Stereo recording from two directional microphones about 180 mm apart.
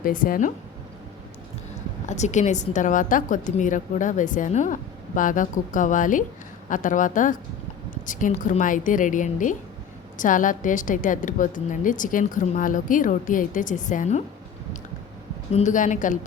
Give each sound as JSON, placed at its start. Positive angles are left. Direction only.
{"t": 0.0, "sound": "a woman's voice", "side_deg": 50}
{"t": 2.0, "sound": "a woman's voice", "side_deg": 40}
{"t": 15.5, "sound": "a woman's voice", "side_deg": 45}